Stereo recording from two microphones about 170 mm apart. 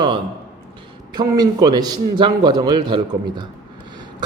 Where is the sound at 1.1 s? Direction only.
25° right (ahead or behind).